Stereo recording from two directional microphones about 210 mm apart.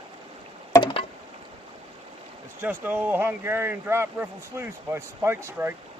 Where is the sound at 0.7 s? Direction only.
25° left (ahead or behind).